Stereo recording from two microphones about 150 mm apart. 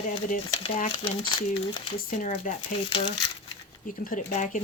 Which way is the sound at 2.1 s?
55° left (ahead or behind).